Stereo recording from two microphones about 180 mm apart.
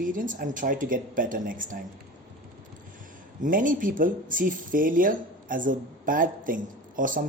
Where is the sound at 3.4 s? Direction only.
50° right (ahead or behind).